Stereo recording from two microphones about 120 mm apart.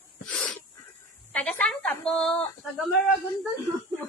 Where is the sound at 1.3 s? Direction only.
10° left (ahead or behind).